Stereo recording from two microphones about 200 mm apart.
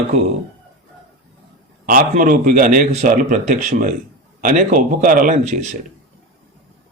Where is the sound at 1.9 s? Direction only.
40° right (ahead or behind).